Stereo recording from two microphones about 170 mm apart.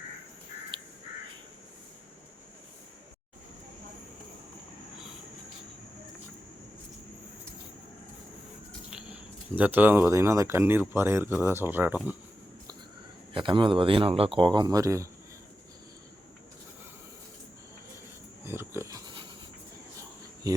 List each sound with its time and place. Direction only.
8.9 s speech: 5° right (ahead or behind)
13.3 s speech: 30° right (ahead or behind)
18.4 s pig: 15° right (ahead or behind)